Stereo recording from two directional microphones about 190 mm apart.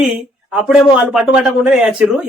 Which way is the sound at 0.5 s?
5° right (ahead or behind).